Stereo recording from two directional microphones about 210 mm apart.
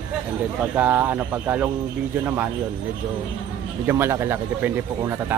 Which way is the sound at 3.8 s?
10° right (ahead or behind).